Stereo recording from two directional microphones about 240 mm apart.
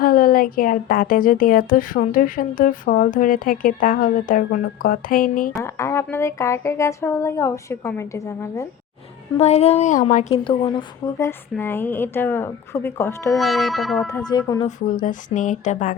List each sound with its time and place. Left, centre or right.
0.0 s a woman's voice: left
5.5 s a woman's voice: centre
9.4 s a woman's voice: left
13.3 s music: centre
14.3 s a woman's voice: centre
14.8 s a woman's voice: left